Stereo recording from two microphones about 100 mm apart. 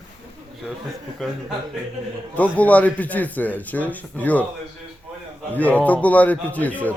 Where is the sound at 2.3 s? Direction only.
15° left (ahead or behind).